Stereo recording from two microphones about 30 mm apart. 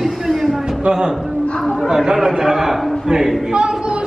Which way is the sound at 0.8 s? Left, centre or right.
Right.